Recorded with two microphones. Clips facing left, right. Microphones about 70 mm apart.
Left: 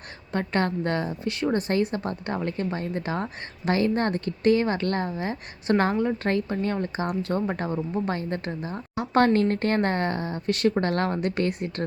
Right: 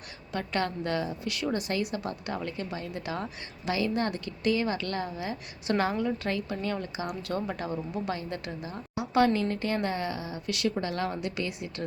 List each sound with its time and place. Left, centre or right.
0.3 s a woman's voice: left